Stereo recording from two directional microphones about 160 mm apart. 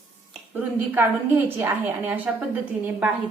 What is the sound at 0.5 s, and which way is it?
A woman's voice, 15° right (ahead or behind).